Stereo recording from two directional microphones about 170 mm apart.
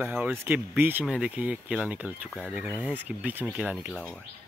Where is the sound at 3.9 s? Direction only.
5° left (ahead or behind).